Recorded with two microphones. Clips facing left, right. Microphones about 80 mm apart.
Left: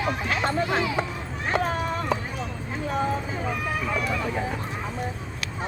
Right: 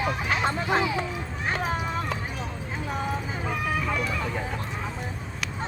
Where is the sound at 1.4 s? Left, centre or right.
Centre.